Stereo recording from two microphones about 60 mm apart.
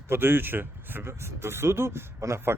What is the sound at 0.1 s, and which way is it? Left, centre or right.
Speech, right.